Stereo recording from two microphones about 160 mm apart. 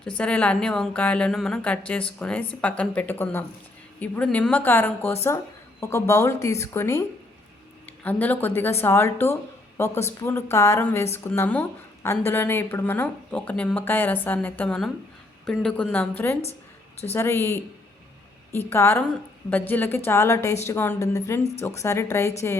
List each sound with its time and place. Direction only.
0.2 s speech: 5° left (ahead or behind)
8.0 s a woman's voice: 10° left (ahead or behind)